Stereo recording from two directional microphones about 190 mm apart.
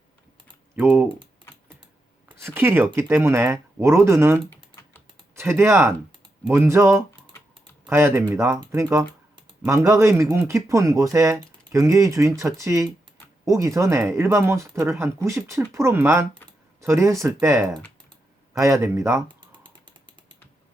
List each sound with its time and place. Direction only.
0.8 s speech: 10° right (ahead or behind)
2.4 s speech: 10° right (ahead or behind)
4.4 s typing: 15° left (ahead or behind)
5.3 s speech: 15° right (ahead or behind)
7.1 s typing: 10° left (ahead or behind)
7.9 s speech: 10° right (ahead or behind)